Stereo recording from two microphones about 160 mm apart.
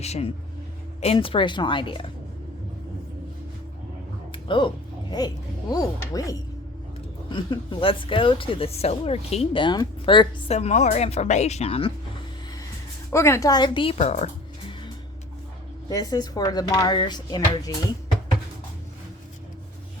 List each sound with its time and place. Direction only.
0.0 s a woman's voice: 40° left (ahead or behind)
4.3 s a sound: 30° left (ahead or behind)
5.1 s a woman's voice: 25° left (ahead or behind)
13.1 s speech: 15° left (ahead or behind); by 14.3 s 40° left (ahead or behind)
15.9 s speech: 20° left (ahead or behind)